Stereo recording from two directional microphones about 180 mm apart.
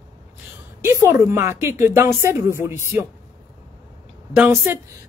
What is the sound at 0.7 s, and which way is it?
Speech, 15° right (ahead or behind).